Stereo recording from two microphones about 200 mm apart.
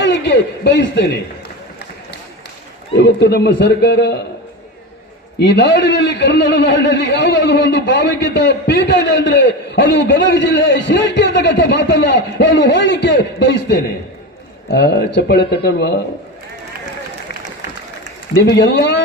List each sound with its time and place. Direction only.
0.0 s a man's voice: 60° left (ahead or behind)
2.9 s a man's voice: 55° left (ahead or behind)
5.4 s a man's voice: 60° left (ahead or behind)
18.4 s a man's voice: 60° left (ahead or behind)